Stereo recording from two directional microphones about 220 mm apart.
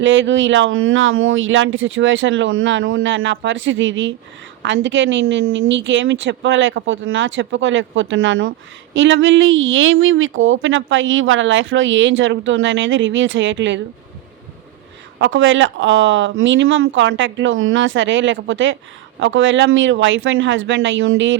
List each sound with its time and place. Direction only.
0.0 s a woman's voice: 60° right (ahead or behind)
15.2 s a woman's voice: 60° right (ahead or behind)